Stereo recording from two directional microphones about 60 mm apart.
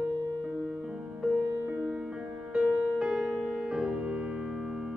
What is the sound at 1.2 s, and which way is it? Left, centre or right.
Music, centre.